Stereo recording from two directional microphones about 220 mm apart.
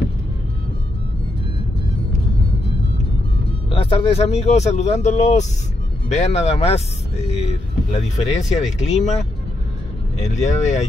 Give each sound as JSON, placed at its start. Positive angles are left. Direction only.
{"t": 3.7, "sound": "speech", "side_deg": 25}
{"t": 10.2, "sound": "speech", "side_deg": 30}